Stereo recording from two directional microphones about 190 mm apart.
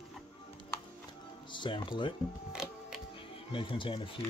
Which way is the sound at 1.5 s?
25° left (ahead or behind).